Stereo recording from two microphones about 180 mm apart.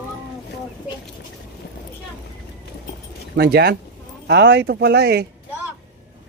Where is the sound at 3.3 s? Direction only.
65° right (ahead or behind).